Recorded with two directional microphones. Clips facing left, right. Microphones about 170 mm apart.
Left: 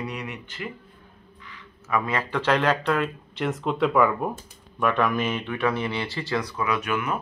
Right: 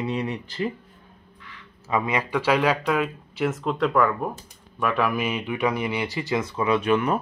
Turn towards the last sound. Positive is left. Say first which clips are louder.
# right 5 dB
turn(degrees=-35)  # may be behind; listen again after turning